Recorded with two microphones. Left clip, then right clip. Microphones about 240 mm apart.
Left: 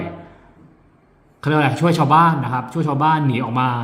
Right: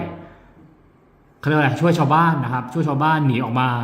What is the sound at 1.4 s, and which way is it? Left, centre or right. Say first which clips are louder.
A man's voice: left 1 dB; centre.